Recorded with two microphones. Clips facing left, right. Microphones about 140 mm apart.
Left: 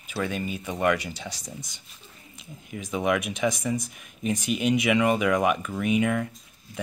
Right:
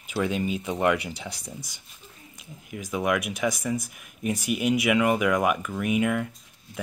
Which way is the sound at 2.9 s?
5° right (ahead or behind).